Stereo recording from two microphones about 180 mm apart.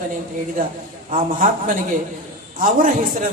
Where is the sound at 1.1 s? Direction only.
45° right (ahead or behind).